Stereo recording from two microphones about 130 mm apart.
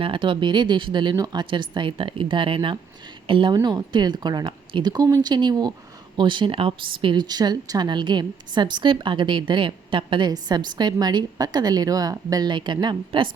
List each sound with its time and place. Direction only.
0.0 s a woman's voice: 40° right (ahead or behind)